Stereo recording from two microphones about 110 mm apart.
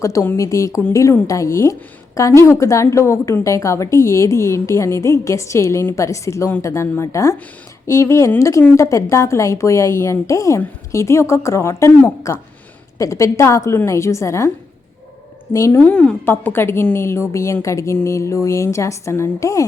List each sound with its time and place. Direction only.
0.0 s a woman's voice: 25° left (ahead or behind)
15.7 s a woman's voice: 15° left (ahead or behind)